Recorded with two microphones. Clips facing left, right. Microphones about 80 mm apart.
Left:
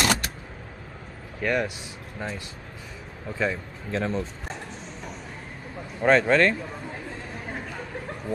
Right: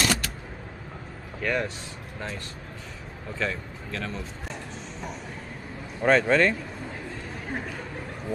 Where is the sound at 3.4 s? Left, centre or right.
Left.